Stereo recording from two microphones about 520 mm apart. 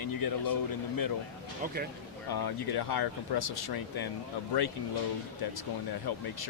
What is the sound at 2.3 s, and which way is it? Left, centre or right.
Speech, left.